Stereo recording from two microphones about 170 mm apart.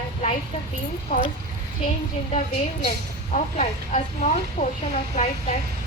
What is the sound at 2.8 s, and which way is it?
A woman's voice, 40° left (ahead or behind).